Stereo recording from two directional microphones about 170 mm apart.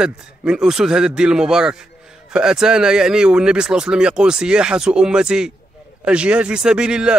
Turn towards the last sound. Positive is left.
turn(degrees=-5)  # may be behind; listen again after turning